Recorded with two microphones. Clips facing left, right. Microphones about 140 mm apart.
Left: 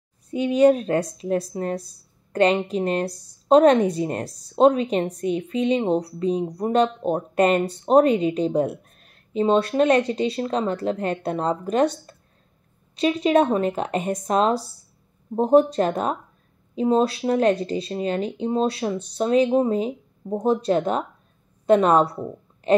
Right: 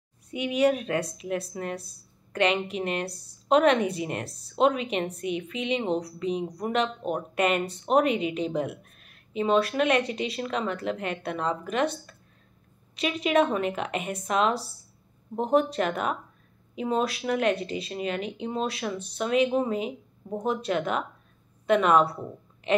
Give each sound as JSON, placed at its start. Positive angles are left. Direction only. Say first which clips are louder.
{"t": 0.3, "sound": "a woman's voice", "louder": "left 7 dB", "side_deg": 35}